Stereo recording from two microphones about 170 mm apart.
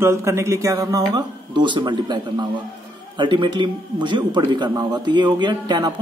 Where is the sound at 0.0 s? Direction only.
15° right (ahead or behind).